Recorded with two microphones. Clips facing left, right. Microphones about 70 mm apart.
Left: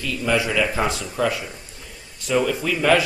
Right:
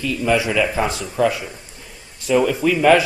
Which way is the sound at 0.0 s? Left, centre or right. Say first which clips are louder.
Right 3 dB; centre.